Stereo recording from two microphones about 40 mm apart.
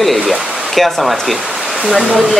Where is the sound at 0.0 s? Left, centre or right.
Centre.